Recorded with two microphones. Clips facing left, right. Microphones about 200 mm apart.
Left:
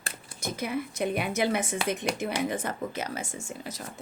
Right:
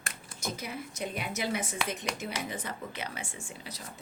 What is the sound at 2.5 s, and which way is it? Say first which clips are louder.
Speech: left 7 dB; 50° left (ahead or behind).